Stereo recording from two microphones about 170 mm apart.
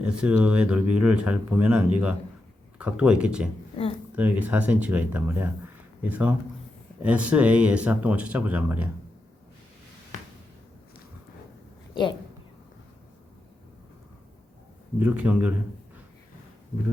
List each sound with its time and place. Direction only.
0.0 s speech: 5° right (ahead or behind)
14.9 s speech: 10° right (ahead or behind)